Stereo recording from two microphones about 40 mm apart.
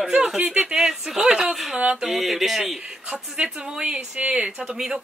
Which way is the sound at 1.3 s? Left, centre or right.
Centre.